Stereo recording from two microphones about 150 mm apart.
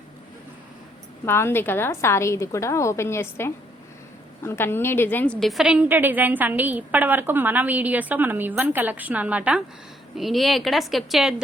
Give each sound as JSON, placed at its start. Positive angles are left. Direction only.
{"t": 1.2, "sound": "a woman's voice", "side_deg": 15}